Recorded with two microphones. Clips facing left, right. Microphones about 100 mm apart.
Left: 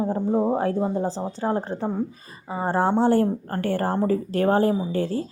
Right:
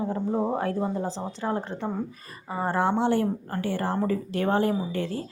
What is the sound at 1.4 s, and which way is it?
Speech, 35° left (ahead or behind).